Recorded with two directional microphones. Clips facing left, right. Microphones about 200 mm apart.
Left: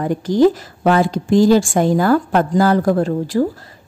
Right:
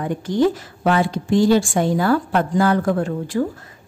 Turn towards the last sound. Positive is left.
turn(degrees=35)  # may be behind; listen again after turning